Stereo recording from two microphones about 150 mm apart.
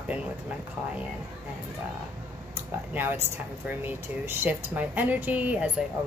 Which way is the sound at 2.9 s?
15° right (ahead or behind).